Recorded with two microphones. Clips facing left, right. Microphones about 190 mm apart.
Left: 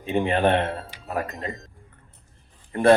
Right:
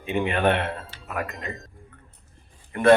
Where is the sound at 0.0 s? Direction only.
35° left (ahead or behind).